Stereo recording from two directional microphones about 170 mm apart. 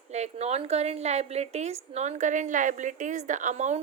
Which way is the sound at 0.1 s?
40° right (ahead or behind).